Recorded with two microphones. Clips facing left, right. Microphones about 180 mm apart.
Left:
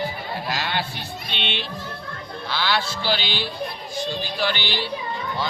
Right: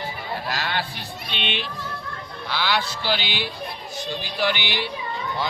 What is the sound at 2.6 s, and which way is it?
Speech, 15° right (ahead or behind).